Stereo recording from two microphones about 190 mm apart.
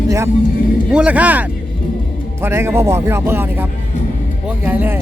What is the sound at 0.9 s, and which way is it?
Speech, 5° right (ahead or behind).